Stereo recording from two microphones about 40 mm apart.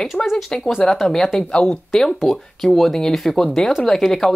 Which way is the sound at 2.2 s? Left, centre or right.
Centre.